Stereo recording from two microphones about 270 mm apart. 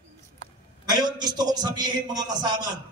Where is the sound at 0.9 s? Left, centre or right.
Centre.